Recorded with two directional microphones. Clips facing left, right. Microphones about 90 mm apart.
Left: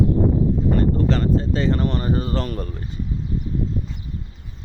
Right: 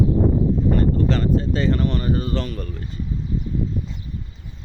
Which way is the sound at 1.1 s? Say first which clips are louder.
Even; 35° left (ahead or behind).